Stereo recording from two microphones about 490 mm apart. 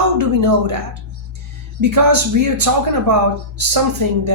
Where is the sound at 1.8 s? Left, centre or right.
Right.